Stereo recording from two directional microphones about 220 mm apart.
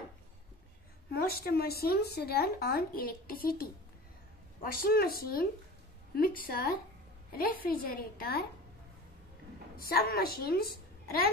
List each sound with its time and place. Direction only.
1.1 s speech: 45° left (ahead or behind)
4.8 s a woman's voice: 45° left (ahead or behind)
9.8 s a woman's voice: 45° left (ahead or behind)